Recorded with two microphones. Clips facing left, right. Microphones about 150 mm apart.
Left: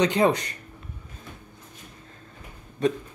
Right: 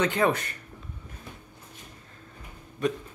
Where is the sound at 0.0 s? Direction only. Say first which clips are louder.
Left 3 dB; 20° left (ahead or behind).